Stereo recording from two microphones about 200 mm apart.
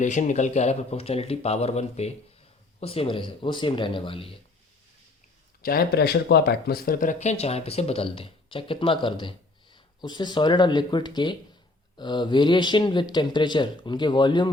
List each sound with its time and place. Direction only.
0.0 s speech: 40° left (ahead or behind)
5.6 s speech: 50° left (ahead or behind); by 14.5 s 20° left (ahead or behind)